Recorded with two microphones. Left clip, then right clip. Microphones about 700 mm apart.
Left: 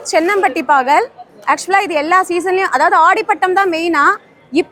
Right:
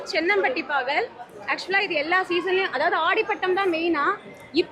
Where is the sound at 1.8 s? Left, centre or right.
Left.